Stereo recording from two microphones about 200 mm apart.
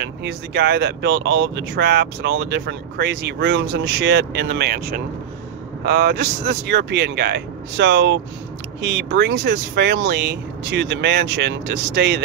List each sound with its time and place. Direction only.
0.0 s speech: 60° right (ahead or behind)